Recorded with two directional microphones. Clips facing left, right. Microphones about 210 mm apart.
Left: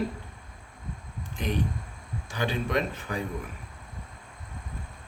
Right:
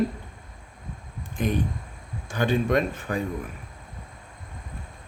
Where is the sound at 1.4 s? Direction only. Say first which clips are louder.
Right 4 dB; 50° right (ahead or behind).